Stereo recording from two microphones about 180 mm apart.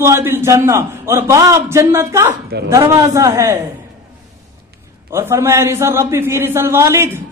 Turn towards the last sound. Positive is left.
turn(degrees=-15)  # may be behind; listen again after turning